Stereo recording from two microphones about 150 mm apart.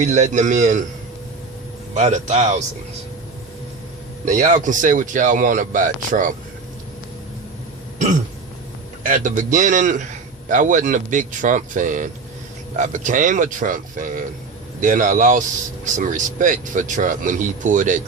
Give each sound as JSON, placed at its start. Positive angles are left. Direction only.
{"t": 0.0, "sound": "a man's voice", "side_deg": -50}
{"t": 1.9, "sound": "a man's voice", "side_deg": -50}
{"t": 4.3, "sound": "speech", "side_deg": -55}
{"t": 9.0, "sound": "speech", "side_deg": -60}